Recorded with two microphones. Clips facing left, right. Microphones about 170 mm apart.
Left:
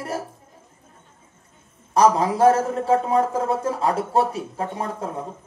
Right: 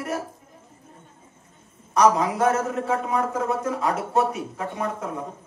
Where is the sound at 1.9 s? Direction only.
30° left (ahead or behind).